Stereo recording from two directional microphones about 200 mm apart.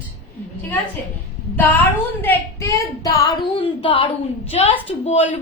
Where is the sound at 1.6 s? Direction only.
10° left (ahead or behind).